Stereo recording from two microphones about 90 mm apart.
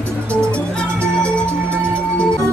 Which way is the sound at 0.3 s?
10° left (ahead or behind).